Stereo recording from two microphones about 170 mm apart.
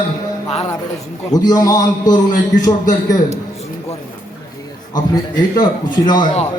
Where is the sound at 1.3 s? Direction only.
20° left (ahead or behind).